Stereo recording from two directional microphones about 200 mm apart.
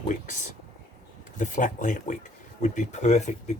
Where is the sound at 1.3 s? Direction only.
40° left (ahead or behind).